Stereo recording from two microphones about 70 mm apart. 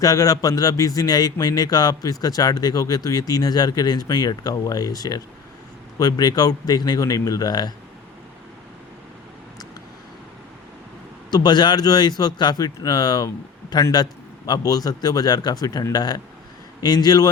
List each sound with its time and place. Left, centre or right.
0.0 s a man's voice: left
11.3 s a man's voice: left